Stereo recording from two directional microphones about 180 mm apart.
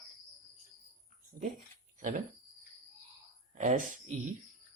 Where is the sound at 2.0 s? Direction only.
45° right (ahead or behind).